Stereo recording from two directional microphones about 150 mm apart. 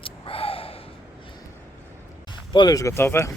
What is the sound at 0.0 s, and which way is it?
Gasp, 40° left (ahead or behind).